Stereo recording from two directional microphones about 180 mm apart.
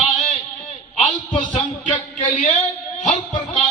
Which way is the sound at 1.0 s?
45° left (ahead or behind).